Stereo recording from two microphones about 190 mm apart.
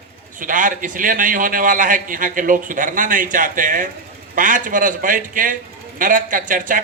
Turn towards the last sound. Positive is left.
turn(degrees=-45)  # may be behind; listen again after turning